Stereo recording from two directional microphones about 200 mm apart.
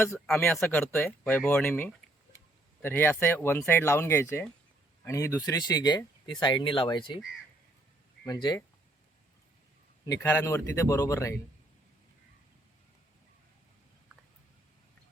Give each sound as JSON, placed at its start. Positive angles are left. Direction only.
{"t": 0.0, "sound": "speech", "side_deg": 10}
{"t": 8.2, "sound": "speech", "side_deg": 20}
{"t": 10.1, "sound": "speech", "side_deg": 15}